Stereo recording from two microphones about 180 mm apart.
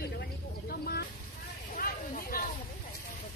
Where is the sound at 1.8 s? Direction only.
55° left (ahead or behind).